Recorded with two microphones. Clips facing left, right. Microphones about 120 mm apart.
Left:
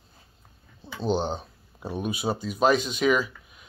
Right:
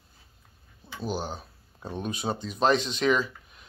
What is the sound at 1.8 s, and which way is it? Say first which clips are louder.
Speech: left 3 dB; 10° left (ahead or behind).